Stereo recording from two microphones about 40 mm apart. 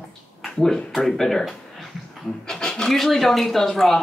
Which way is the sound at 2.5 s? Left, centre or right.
Centre.